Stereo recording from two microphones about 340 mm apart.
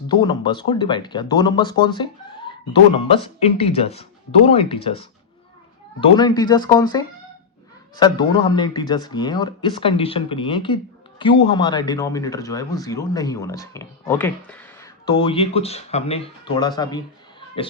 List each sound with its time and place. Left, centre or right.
0.1 s speech: centre